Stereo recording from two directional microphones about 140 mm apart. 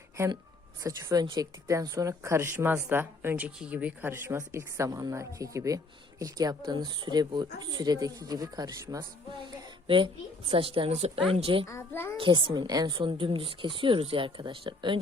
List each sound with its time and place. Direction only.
0.8 s a woman's voice: 25° right (ahead or behind)
9.4 s a woman's voice: 35° right (ahead or behind)
11.7 s a child's voice: 20° left (ahead or behind)
12.1 s a woman's voice: 35° right (ahead or behind)